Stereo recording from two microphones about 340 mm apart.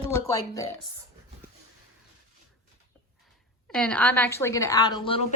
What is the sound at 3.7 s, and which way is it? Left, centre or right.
Speech, centre.